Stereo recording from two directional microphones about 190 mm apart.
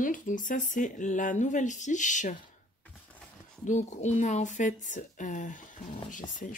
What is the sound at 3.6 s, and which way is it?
Speech, 40° left (ahead or behind).